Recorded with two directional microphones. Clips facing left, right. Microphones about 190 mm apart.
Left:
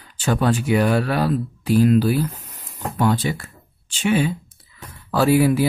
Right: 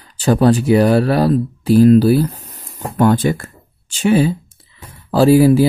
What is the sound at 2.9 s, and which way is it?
Speech, 50° right (ahead or behind).